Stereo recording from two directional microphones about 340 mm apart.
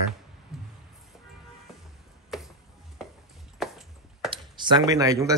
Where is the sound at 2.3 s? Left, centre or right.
Centre.